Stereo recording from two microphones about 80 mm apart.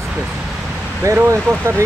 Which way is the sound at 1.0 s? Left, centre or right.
Right.